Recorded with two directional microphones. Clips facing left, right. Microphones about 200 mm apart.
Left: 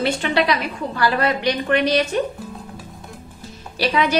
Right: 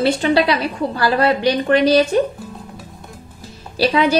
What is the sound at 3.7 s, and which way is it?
Speech, 30° right (ahead or behind).